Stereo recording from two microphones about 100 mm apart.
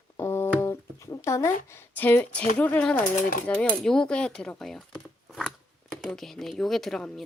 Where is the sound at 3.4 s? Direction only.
10° left (ahead or behind).